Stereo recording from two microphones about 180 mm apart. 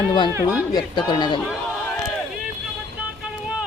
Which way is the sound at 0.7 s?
25° left (ahead or behind).